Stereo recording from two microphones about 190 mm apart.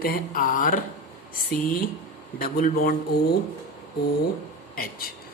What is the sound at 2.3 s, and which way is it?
Speech, 50° left (ahead or behind).